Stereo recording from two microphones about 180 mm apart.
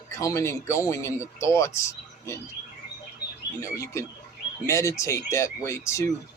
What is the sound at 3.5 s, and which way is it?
Speech, 15° left (ahead or behind).